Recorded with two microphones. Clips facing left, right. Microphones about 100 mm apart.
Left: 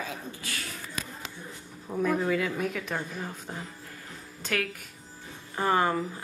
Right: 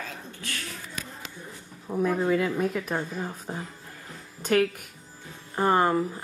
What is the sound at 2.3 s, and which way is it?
Speech, 35° right (ahead or behind).